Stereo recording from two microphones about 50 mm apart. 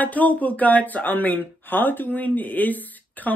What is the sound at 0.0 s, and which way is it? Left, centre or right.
Speech, left.